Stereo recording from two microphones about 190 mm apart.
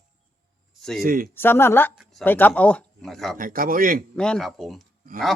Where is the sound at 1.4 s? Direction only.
10° left (ahead or behind).